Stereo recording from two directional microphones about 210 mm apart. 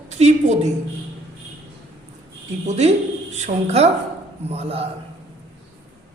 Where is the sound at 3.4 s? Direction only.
30° right (ahead or behind).